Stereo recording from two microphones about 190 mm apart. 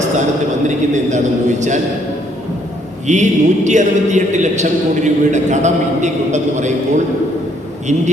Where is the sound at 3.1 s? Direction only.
40° right (ahead or behind).